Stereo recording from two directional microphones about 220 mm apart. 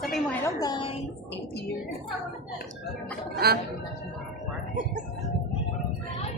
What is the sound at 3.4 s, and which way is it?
Speech, 45° right (ahead or behind).